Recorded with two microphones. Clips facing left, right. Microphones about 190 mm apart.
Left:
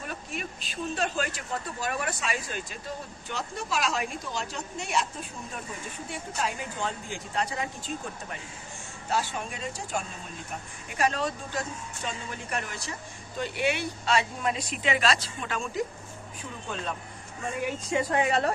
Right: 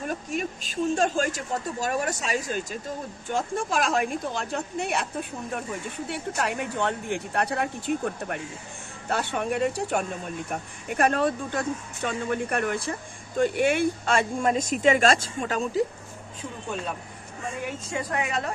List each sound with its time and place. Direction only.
0.0 s a woman's voice: 45° right (ahead or behind)
6.1 s a woman's voice: 65° right (ahead or behind); by 15.8 s 40° right (ahead or behind)
17.9 s a woman's voice: 30° left (ahead or behind)